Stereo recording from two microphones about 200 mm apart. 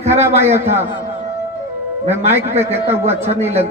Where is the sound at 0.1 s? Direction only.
10° right (ahead or behind).